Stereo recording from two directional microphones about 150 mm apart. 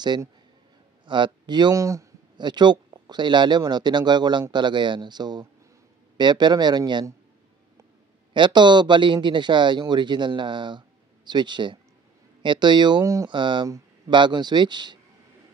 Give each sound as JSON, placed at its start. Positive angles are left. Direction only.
{"t": 0.0, "sound": "speech", "side_deg": -30}
{"t": 8.3, "sound": "speech", "side_deg": -30}
{"t": 13.7, "sound": "a sound", "side_deg": -20}
{"t": 14.1, "sound": "speech", "side_deg": -30}